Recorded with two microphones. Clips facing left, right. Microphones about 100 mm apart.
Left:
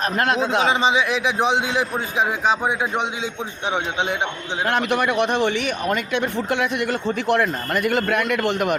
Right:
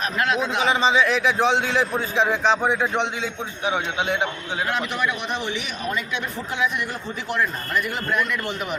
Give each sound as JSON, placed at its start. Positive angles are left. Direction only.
{"t": 0.6, "sound": "a man's voice", "side_deg": 20}
{"t": 3.7, "sound": "speech", "side_deg": 25}
{"t": 4.6, "sound": "a man's voice", "side_deg": 60}